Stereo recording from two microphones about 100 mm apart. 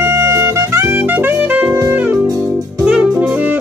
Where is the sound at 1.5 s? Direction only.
15° right (ahead or behind).